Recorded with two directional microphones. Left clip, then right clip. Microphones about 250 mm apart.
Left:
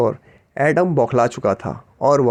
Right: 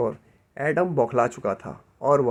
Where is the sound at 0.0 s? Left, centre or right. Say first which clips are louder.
Left 7 dB; left.